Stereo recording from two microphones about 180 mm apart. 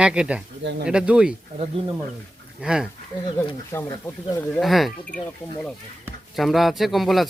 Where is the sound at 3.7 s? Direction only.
15° left (ahead or behind).